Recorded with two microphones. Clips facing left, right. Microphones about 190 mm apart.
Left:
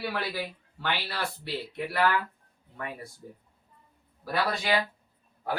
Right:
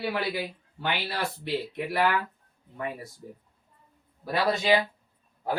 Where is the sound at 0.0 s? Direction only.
20° right (ahead or behind).